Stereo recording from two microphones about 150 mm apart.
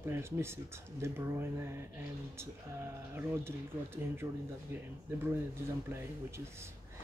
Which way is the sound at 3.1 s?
15° right (ahead or behind).